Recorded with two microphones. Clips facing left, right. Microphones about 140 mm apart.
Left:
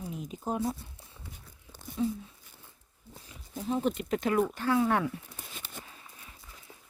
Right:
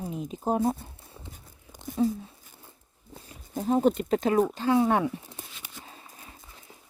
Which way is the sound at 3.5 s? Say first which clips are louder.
Right 7 dB; 45° right (ahead or behind).